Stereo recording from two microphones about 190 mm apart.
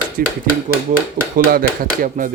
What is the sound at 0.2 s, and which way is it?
Speech, 50° right (ahead or behind).